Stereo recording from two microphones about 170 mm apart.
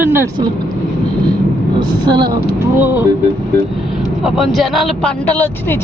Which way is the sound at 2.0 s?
25° right (ahead or behind).